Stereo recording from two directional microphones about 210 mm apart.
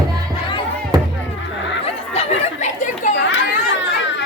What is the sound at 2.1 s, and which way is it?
Chatter, 35° left (ahead or behind).